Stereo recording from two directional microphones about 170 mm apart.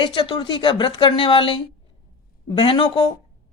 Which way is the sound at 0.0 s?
30° left (ahead or behind).